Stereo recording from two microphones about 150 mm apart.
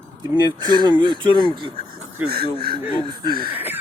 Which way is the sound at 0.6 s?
30° right (ahead or behind).